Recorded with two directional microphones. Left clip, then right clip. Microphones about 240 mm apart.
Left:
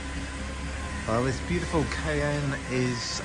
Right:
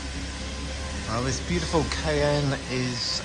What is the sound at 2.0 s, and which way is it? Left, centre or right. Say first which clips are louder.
Speech: right 4 dB; centre.